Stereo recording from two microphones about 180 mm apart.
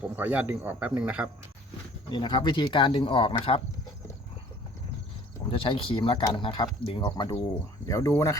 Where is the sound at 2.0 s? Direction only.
25° left (ahead or behind).